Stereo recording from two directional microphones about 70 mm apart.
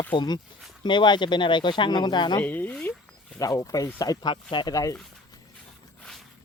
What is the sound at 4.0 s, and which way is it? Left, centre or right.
Speech, left.